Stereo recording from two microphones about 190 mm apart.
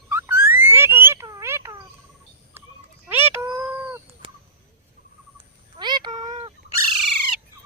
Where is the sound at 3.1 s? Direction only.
10° right (ahead or behind).